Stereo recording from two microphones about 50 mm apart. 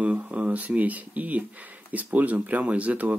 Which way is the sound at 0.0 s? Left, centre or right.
Right.